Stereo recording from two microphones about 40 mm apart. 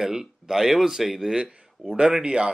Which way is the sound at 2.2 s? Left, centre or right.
Right.